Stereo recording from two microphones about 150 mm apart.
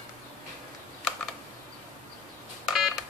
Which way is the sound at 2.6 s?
5° right (ahead or behind).